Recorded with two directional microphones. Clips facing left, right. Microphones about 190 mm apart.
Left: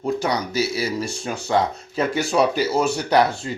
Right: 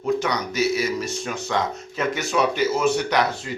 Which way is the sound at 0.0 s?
30° left (ahead or behind).